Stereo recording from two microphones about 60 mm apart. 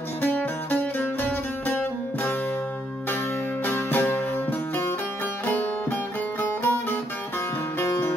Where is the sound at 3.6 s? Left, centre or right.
Left.